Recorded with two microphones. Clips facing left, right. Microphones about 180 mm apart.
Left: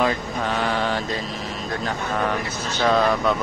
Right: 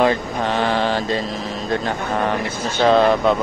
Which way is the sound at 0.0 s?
30° right (ahead or behind).